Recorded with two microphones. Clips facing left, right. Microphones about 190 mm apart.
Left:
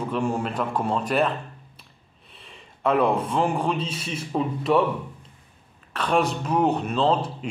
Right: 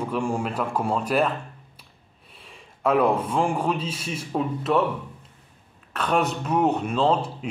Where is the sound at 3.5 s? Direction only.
5° right (ahead or behind).